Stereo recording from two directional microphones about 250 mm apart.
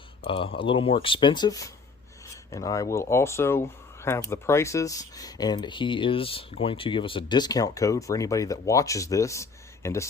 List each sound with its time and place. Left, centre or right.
0.2 s speech: left